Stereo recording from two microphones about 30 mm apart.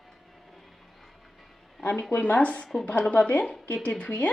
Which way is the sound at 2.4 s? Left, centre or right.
Left.